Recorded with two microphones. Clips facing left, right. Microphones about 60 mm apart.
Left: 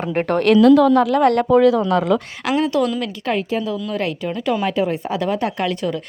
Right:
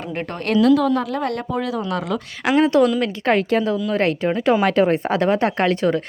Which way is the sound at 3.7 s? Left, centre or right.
Right.